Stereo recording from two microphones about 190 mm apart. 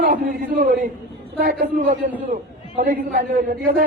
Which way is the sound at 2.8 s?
45° right (ahead or behind).